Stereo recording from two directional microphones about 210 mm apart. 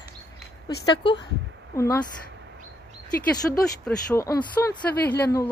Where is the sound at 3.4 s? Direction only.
5° left (ahead or behind).